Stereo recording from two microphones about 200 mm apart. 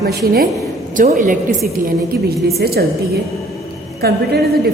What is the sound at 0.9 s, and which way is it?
A woman's voice, 40° right (ahead or behind).